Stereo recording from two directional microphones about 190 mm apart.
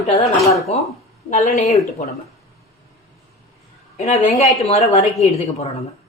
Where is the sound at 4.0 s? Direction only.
35° left (ahead or behind).